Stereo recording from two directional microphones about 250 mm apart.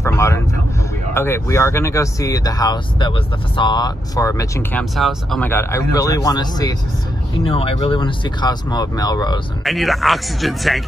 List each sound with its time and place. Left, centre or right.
0.0 s vehicle: centre
1.1 s speech: centre
9.7 s speech: centre